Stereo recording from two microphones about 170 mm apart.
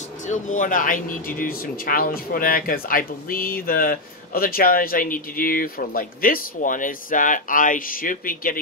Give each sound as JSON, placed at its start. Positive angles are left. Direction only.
{"t": 0.3, "sound": "speech", "side_deg": 50}